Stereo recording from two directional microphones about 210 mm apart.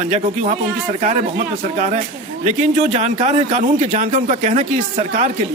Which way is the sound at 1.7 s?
35° right (ahead or behind).